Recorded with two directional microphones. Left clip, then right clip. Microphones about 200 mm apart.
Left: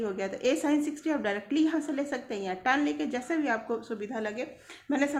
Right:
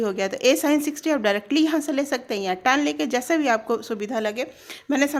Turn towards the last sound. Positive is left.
turn(degrees=-40)  # may be behind; listen again after turning